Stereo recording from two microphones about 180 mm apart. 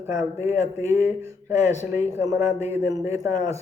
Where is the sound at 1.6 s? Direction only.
40° left (ahead or behind).